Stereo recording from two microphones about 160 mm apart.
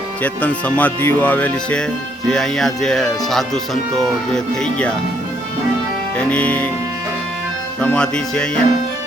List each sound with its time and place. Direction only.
0.2 s speech: 10° left (ahead or behind)
6.1 s speech: 10° left (ahead or behind)
7.8 s speech: 5° left (ahead or behind)